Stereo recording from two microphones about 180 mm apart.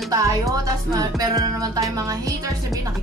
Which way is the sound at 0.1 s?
20° right (ahead or behind).